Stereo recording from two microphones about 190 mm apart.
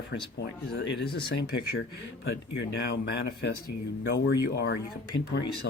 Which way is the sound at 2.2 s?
65° left (ahead or behind).